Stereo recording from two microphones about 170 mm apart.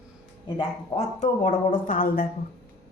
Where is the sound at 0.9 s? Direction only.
40° left (ahead or behind).